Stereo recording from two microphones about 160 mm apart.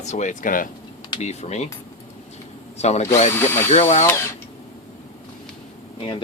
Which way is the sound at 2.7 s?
45° left (ahead or behind).